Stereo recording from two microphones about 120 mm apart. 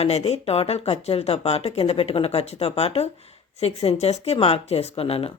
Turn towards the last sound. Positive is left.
turn(degrees=55)  # may be behind; listen again after turning